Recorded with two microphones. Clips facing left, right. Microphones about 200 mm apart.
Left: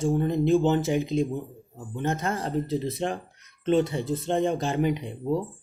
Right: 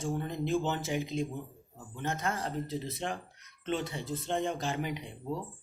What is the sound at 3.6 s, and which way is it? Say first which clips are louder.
Speech: left 11 dB; 35° left (ahead or behind).